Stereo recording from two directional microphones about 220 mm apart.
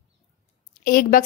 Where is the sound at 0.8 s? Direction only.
40° left (ahead or behind).